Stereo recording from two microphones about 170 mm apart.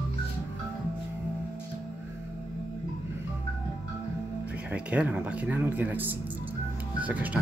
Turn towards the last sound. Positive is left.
turn(degrees=-10)  # may be behind; listen again after turning